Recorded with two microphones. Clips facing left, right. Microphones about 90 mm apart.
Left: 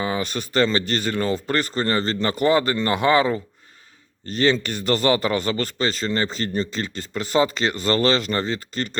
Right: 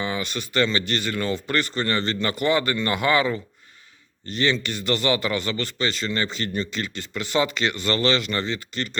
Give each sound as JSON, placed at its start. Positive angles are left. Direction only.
{"t": 0.0, "sound": "speech", "side_deg": 40}